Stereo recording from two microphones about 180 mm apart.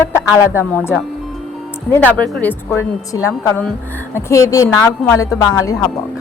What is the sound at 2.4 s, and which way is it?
Speech, 10° left (ahead or behind).